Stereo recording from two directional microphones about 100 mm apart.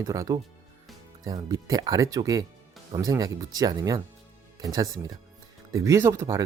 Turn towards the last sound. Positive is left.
turn(degrees=-30)  # may be behind; listen again after turning